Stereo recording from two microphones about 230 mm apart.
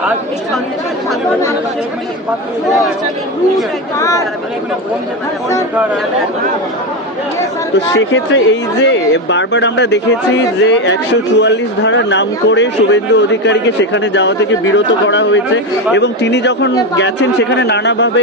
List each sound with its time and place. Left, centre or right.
2.6 s speech: centre
7.9 s speech: left